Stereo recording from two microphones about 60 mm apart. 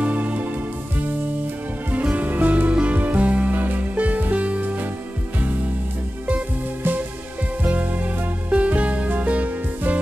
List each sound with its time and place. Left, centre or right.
0.0 s music: right
2.1 s music: right
7.6 s music: right